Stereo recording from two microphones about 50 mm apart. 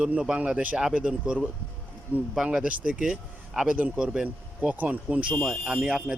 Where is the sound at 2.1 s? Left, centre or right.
Right; by 4.7 s centre.